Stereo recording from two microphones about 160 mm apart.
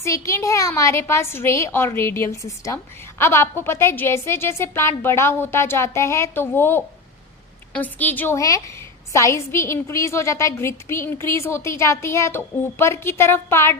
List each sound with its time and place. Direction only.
0.0 s a woman's voice: 20° left (ahead or behind)